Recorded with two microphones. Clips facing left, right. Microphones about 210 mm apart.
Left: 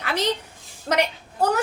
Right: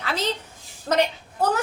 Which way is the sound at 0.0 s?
15° left (ahead or behind).